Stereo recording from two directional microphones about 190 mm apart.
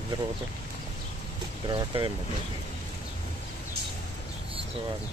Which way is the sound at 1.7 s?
25° right (ahead or behind).